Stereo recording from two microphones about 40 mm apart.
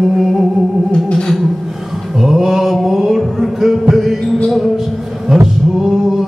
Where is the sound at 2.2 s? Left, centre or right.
Centre.